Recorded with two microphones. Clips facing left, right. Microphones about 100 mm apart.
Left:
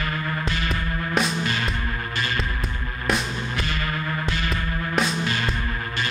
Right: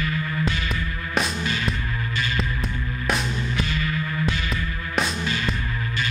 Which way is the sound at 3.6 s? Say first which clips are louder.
Right 1 dB; 55° left (ahead or behind).